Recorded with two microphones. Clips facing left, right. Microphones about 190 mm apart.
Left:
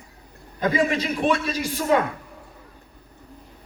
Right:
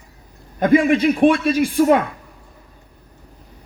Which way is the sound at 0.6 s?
55° right (ahead or behind).